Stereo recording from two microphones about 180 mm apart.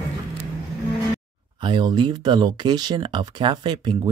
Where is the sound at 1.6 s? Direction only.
25° right (ahead or behind).